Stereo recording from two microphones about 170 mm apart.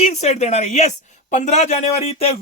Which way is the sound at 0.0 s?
40° left (ahead or behind).